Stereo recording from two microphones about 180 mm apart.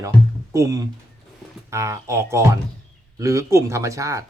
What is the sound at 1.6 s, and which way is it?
Speech, 15° right (ahead or behind).